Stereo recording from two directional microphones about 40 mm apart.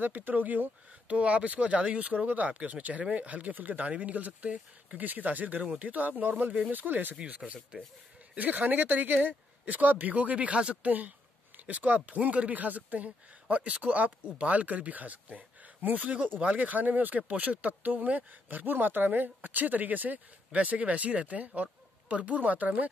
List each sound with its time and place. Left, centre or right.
0.0 s speech: right
1.0 s speech: right
7.2 s speech: right
10.9 s speech: right